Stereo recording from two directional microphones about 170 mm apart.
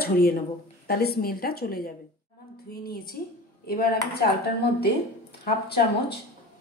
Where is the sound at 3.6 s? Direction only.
65° left (ahead or behind).